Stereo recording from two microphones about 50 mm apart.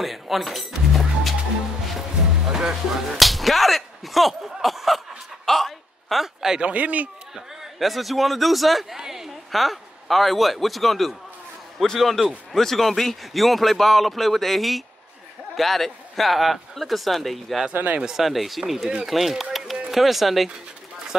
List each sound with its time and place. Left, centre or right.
0.0 s music: centre
2.4 s speech: centre
3.2 s slap: centre
6.6 s a man's voice: right
7.8 s a man's voice: centre
17.7 s a man's voice: right
18.0 s a man's voice: centre